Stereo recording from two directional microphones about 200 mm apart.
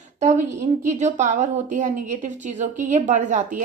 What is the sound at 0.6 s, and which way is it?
Speech, 35° right (ahead or behind).